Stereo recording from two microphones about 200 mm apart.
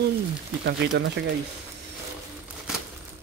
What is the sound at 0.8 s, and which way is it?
Speech, 60° right (ahead or behind).